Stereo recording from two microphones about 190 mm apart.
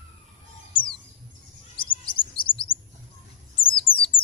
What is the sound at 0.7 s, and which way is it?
Bird, 25° left (ahead or behind).